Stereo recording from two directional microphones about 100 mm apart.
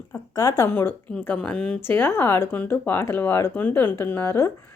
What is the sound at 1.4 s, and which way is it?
Speech, 10° left (ahead or behind).